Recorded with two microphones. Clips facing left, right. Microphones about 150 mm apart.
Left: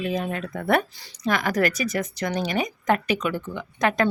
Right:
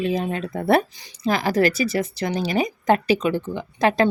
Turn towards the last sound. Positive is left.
turn(degrees=-30)  # may be behind; listen again after turning